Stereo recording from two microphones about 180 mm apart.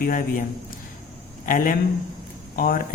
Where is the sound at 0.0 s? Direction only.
50° left (ahead or behind).